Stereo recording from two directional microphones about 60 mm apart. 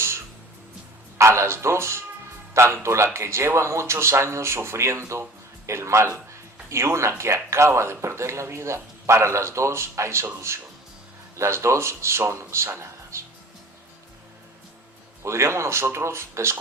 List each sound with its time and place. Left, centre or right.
1.2 s speech: right
12.8 s music: right
15.2 s speech: right